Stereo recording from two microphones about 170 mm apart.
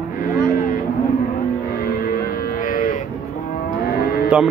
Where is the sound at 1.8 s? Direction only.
60° left (ahead or behind).